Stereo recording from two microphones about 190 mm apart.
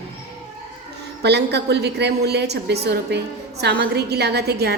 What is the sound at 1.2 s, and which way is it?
A woman's voice, 60° right (ahead or behind).